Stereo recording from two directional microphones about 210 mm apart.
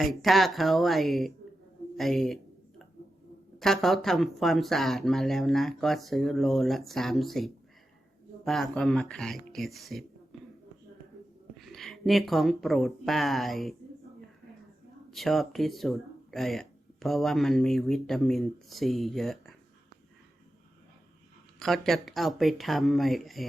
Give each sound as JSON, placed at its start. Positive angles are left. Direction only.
{"t": 0.0, "sound": "speech", "side_deg": 0}
{"t": 2.0, "sound": "a sound", "side_deg": 0}
{"t": 3.6, "sound": "speech", "side_deg": 0}
{"t": 10.3, "sound": "a sound", "side_deg": 0}
{"t": 11.5, "sound": "speech", "side_deg": 0}
{"t": 15.1, "sound": "speech", "side_deg": 0}
{"t": 21.6, "sound": "speech", "side_deg": 0}